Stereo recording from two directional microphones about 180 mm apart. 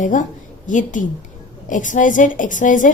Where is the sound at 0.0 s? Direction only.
45° left (ahead or behind).